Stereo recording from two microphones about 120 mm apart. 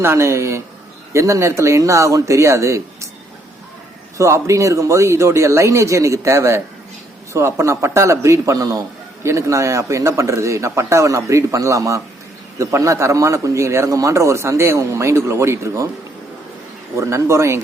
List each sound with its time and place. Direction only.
0.0 s a man's voice: 20° right (ahead or behind)
4.2 s a man's voice: 25° right (ahead or behind)
17.0 s a man's voice: 25° right (ahead or behind)